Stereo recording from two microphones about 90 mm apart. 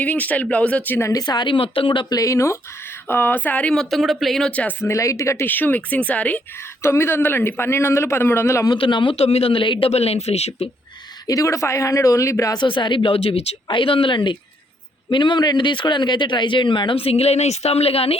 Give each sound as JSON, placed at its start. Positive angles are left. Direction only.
{"t": 0.0, "sound": "speech", "side_deg": 15}
{"t": 1.1, "sound": "speech", "side_deg": 50}
{"t": 2.0, "sound": "speech", "side_deg": 40}
{"t": 4.8, "sound": "speech", "side_deg": 35}
{"t": 5.5, "sound": "speech", "side_deg": 20}
{"t": 6.8, "sound": "a man's voice", "side_deg": 30}
{"t": 8.8, "sound": "a man's voice", "side_deg": 65}
{"t": 11.3, "sound": "speech", "side_deg": 35}
{"t": 12.5, "sound": "speech", "side_deg": 65}